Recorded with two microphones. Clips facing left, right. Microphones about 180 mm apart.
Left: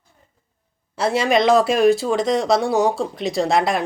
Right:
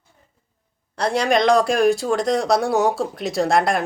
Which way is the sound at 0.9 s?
5° left (ahead or behind).